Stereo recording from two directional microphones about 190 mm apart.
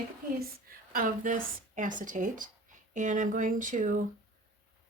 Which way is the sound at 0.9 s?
45° right (ahead or behind).